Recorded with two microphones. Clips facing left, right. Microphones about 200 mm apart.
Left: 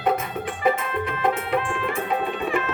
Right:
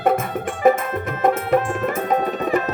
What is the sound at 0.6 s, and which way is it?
Music, 45° right (ahead or behind).